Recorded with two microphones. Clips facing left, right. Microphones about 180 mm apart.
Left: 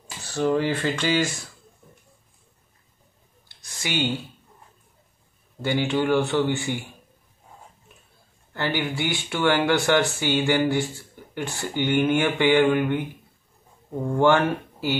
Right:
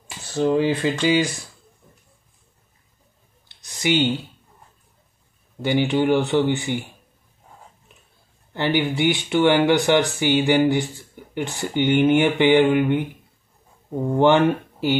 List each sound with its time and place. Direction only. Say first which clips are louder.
0.3 s speech: right 3 dB; 20° right (ahead or behind)
3.4 s a sound: right 10 dB; 20° right (ahead or behind)
5.6 s speech: right 4 dB; 15° right (ahead or behind)
8.5 s speech: right 5 dB; 20° right (ahead or behind)
14.0 s speech: right 3 dB; 20° right (ahead or behind)